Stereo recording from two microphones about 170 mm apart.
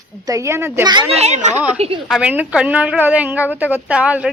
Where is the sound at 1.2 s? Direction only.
40° right (ahead or behind).